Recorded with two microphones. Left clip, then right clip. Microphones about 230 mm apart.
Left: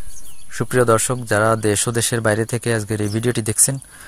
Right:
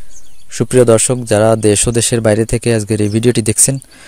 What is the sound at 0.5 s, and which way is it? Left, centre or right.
Speech, right.